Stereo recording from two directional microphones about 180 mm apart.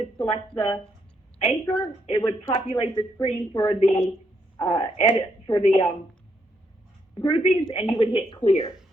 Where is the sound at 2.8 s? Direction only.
30° left (ahead or behind).